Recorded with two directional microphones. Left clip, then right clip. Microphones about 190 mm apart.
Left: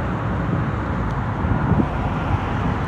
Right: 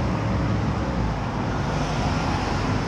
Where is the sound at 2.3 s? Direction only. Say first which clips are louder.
Left 1 dB; 50° right (ahead or behind).